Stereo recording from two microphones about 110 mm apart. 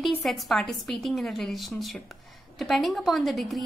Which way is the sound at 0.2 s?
Centre (ahead or behind).